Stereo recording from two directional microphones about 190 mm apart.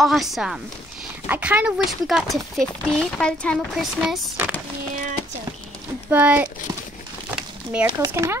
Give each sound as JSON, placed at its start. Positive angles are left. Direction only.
{"t": 0.0, "sound": "speech", "side_deg": 0}
{"t": 6.0, "sound": "speech", "side_deg": -10}
{"t": 7.2, "sound": "crumpling", "side_deg": -5}
{"t": 8.0, "sound": "speech", "side_deg": -15}